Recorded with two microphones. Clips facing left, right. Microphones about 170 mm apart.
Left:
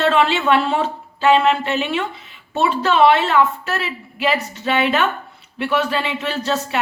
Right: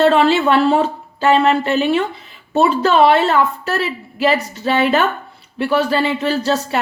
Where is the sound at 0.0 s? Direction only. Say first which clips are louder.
Right 4 dB; 40° right (ahead or behind).